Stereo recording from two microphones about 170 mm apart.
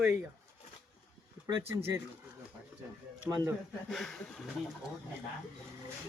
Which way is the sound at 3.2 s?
20° right (ahead or behind).